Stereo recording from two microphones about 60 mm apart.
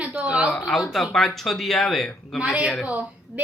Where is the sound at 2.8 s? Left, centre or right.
Right.